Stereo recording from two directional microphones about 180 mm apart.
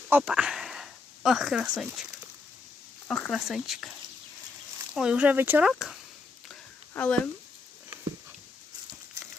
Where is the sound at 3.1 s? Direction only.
5° left (ahead or behind).